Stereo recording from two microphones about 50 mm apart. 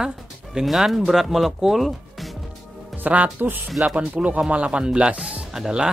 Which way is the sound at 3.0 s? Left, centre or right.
Right.